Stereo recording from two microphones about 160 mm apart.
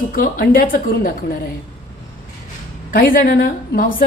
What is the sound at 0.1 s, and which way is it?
A woman's voice, 65° left (ahead or behind).